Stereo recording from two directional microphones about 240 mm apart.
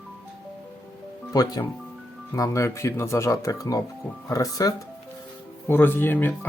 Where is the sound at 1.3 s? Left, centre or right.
Centre.